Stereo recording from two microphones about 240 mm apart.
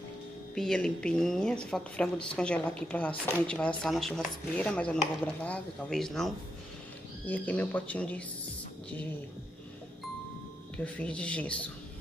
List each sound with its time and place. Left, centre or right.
0.6 s speech: centre
10.8 s speech: centre